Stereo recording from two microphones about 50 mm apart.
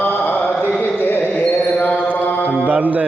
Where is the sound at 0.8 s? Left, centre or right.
Left.